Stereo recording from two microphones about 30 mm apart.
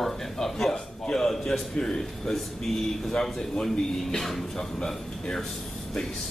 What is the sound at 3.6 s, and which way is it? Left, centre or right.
Speech, centre.